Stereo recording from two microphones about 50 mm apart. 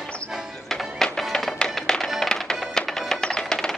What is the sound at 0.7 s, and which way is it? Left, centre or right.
Music, centre.